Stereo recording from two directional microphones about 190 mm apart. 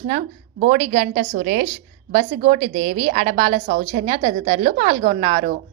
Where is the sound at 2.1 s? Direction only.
35° right (ahead or behind).